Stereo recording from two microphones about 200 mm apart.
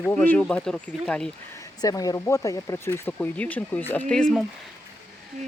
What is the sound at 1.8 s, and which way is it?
Speech, 20° left (ahead or behind).